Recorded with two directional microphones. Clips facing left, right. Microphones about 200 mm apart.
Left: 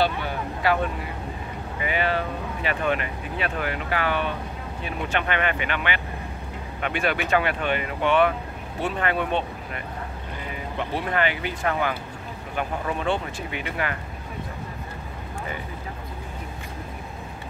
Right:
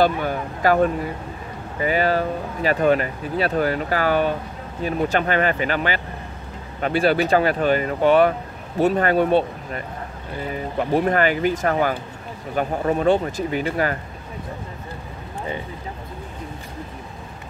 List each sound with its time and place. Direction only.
0.0 s speech: 45° right (ahead or behind)